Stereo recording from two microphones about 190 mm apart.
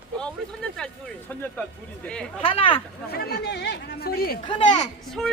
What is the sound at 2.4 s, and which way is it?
Speech, 30° left (ahead or behind).